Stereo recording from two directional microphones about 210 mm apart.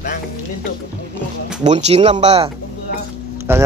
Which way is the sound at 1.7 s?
30° right (ahead or behind).